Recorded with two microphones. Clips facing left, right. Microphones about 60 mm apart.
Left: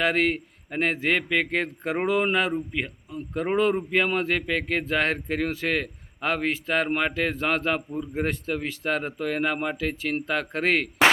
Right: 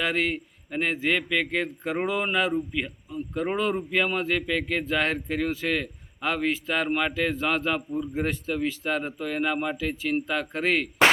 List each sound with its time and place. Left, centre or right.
0.0 s speech: left
3.1 s speech: left
3.4 s speech: left